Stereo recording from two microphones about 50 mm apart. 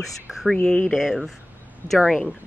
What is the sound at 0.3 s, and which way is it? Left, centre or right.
Speech, centre.